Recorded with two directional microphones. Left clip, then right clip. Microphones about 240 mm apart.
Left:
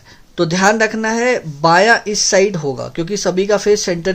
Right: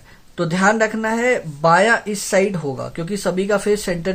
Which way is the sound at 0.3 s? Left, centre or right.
Left.